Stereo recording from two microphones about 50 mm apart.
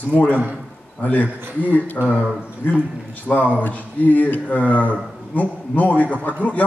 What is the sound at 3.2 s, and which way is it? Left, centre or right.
A man's voice, left.